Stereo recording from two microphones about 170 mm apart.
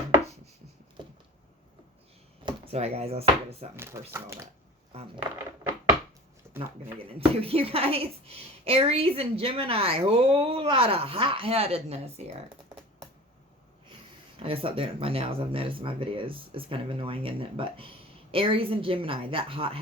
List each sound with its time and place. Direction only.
1.0 s a sound: 30° right (ahead or behind)
2.4 s speech: 30° right (ahead or behind)
3.9 s speech: 15° right (ahead or behind)
4.9 s speech: 35° right (ahead or behind)
6.5 s a sound: 15° right (ahead or behind)
7.1 s speech: 35° right (ahead or behind)
14.3 s speech: 35° right (ahead or behind)